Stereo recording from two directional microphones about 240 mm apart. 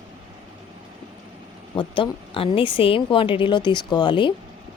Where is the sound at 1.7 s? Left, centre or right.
Left.